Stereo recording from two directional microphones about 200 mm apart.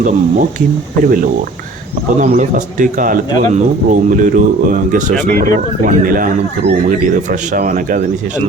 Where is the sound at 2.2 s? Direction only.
40° right (ahead or behind).